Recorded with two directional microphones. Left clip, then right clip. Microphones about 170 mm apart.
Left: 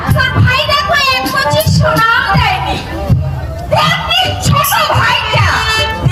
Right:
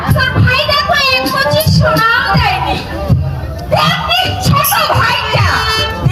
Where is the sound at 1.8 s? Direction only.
15° left (ahead or behind).